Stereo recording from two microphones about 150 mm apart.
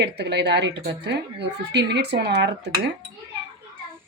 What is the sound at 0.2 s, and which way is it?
Speech, 90° right.